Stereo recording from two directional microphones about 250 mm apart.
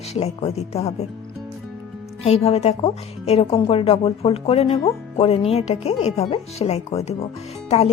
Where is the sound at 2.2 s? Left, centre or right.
Left.